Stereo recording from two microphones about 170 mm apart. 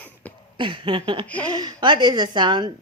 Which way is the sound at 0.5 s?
30° right (ahead or behind).